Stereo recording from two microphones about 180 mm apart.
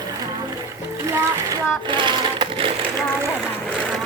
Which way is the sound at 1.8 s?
25° right (ahead or behind).